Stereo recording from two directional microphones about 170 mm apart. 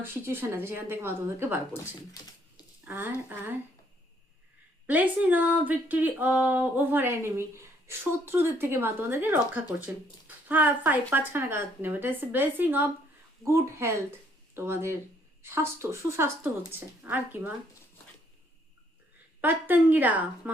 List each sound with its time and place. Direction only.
0.0 s speech: 15° right (ahead or behind)
2.8 s speech: 10° right (ahead or behind)
4.9 s speech: 10° right (ahead or behind)
19.4 s speech: 10° right (ahead or behind)